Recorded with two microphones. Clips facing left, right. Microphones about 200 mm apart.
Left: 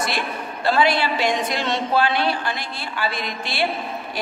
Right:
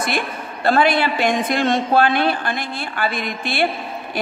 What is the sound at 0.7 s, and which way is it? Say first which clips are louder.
A man's voice: right 3 dB; 50° right (ahead or behind).